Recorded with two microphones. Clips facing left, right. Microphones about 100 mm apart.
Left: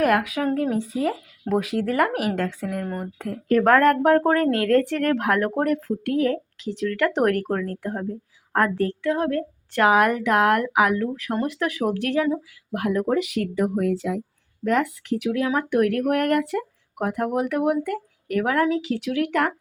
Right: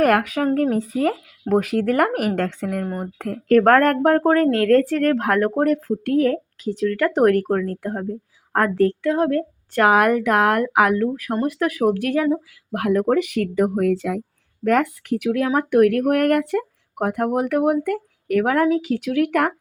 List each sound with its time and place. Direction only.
0.0 s speech: 50° right (ahead or behind)
11.3 s speech: 15° right (ahead or behind)
11.6 s speech: 45° right (ahead or behind)